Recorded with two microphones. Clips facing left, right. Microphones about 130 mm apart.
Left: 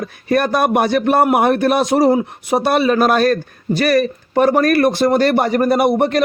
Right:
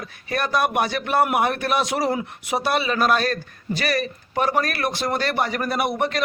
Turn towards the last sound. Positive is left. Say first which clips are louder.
# left 9 dB
turn(degrees=40)  # may be behind; listen again after turning